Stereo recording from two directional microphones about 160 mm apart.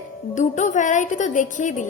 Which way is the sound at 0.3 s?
50° left (ahead or behind).